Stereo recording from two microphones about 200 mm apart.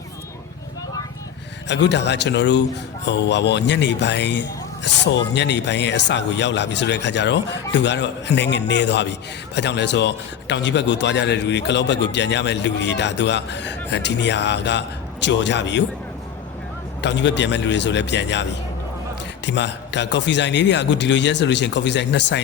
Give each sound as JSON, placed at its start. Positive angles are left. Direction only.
{"t": 1.6, "sound": "a man's voice", "side_deg": 60}
{"t": 17.0, "sound": "a man's voice", "side_deg": 60}
{"t": 19.5, "sound": "a man's voice", "side_deg": 60}